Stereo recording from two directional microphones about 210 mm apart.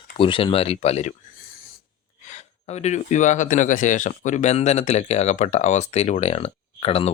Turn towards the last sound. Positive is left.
turn(degrees=30)  # may be behind; listen again after turning